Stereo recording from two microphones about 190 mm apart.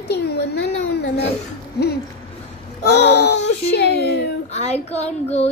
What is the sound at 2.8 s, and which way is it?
A child's voice, 60° left (ahead or behind).